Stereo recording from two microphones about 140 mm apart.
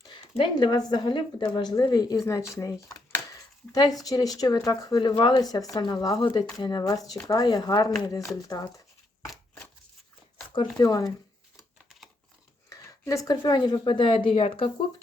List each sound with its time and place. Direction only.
0.0 s a woman's voice: 35° left (ahead or behind)
3.1 s a sound: 25° left (ahead or behind)
4.0 s a woman's voice: 25° left (ahead or behind)
10.5 s a woman's voice: 30° left (ahead or behind)
12.7 s speech: 25° left (ahead or behind); by 14.7 s 40° left (ahead or behind)